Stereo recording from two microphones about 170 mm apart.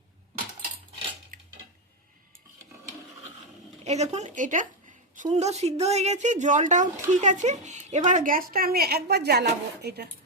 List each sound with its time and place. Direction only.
1.3 s tick-tock: 55° right (ahead or behind)
3.8 s a woman's voice: 40° right (ahead or behind); by 10.1 s 70° right (ahead or behind)